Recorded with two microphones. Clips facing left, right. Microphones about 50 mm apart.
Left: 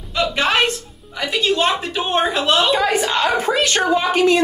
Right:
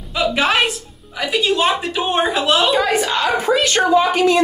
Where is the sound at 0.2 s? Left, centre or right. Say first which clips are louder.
Right 1 dB; centre.